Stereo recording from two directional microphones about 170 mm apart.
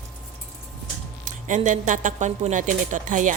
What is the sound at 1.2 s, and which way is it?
Speech, 45° right (ahead or behind).